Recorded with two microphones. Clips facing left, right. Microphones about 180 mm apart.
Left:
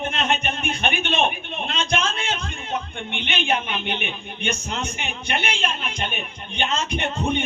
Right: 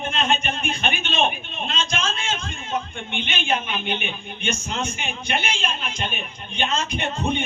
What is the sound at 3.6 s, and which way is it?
Speech, 60° left (ahead or behind).